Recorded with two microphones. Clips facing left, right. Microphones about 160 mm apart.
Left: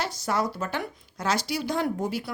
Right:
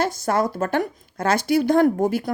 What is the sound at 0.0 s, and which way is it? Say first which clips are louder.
Speech: right 6 dB; 50° right (ahead or behind).